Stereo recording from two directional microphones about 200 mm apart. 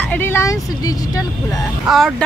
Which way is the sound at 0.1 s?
10° left (ahead or behind).